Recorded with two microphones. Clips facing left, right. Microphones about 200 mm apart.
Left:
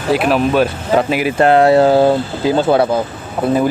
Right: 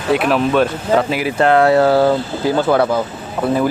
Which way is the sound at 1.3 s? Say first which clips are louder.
Left 2 dB; 25° left (ahead or behind).